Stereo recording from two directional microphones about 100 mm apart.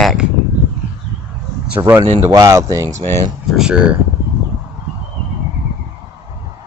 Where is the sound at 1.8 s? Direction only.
45° right (ahead or behind).